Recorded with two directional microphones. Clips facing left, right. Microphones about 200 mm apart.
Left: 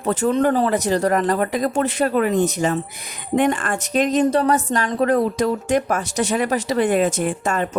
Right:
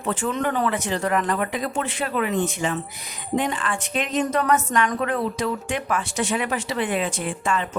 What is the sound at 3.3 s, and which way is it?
A woman's voice, 55° left (ahead or behind).